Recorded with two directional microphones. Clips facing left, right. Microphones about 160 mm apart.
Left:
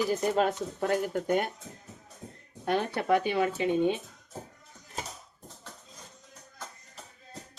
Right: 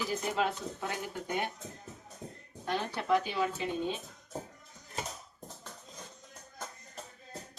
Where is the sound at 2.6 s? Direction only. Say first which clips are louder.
Left 6 dB; 55° left (ahead or behind).